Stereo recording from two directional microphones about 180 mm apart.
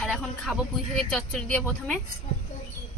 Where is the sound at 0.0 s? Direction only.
5° left (ahead or behind).